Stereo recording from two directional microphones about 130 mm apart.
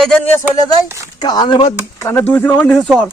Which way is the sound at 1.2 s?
35° left (ahead or behind).